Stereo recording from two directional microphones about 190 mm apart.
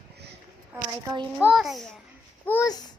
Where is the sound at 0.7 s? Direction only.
20° right (ahead or behind).